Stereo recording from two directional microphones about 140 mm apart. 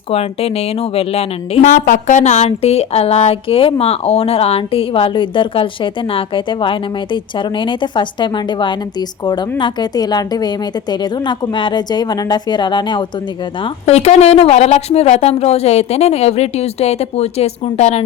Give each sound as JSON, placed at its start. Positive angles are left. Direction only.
{"t": 0.1, "sound": "a woman's voice", "side_deg": 45}
{"t": 1.7, "sound": "speech", "side_deg": 70}
{"t": 13.6, "sound": "a woman's voice", "side_deg": 45}